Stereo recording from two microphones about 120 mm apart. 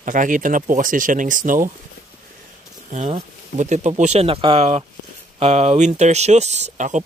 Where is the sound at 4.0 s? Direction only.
65° right (ahead or behind).